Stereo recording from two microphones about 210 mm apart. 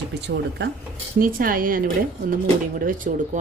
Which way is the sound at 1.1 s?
40° right (ahead or behind).